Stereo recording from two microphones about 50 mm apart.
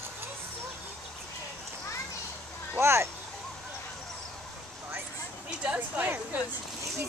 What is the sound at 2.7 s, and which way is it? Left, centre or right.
Speech, right.